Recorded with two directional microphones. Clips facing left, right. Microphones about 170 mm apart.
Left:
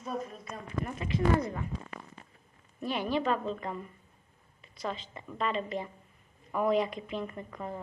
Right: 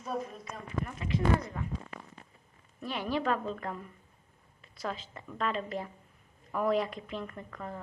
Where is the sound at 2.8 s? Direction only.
10° left (ahead or behind).